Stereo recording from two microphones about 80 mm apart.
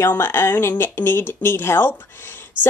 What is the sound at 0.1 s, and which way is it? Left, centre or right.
Speech, left.